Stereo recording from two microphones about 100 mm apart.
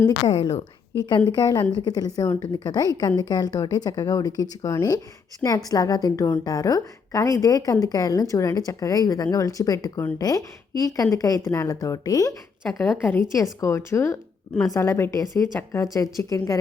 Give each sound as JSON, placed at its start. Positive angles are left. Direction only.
{"t": 1.0, "sound": "a woman's voice", "side_deg": 45}
{"t": 12.6, "sound": "a woman's voice", "side_deg": 0}
{"t": 13.1, "sound": "a woman's voice", "side_deg": 30}